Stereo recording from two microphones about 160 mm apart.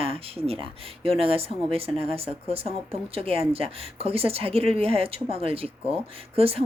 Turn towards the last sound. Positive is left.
turn(degrees=-35)  # may be behind; listen again after turning